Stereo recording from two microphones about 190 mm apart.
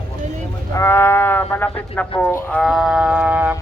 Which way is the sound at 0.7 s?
15° left (ahead or behind).